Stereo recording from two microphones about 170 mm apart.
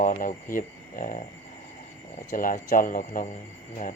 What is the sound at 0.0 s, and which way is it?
Speech, 50° left (ahead or behind).